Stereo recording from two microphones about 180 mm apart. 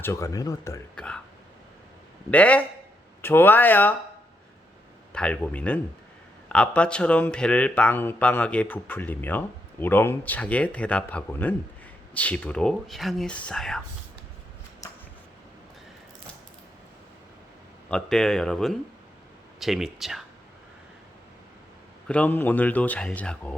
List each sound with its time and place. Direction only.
0.0 s speech: 15° left (ahead or behind)
0.9 s a sound: 5° left (ahead or behind)
2.3 s speech: 10° left (ahead or behind)
5.1 s speech: 5° left (ahead or behind)
17.8 s speech: 5° left (ahead or behind)
22.0 s speech: 5° left (ahead or behind)